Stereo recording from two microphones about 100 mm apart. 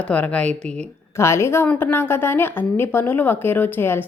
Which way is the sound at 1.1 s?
25° left (ahead or behind).